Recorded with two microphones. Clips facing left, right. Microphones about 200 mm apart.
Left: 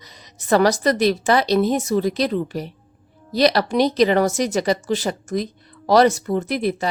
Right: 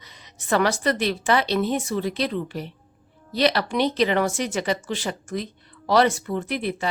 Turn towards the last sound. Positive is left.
turn(degrees=40)  # may be behind; listen again after turning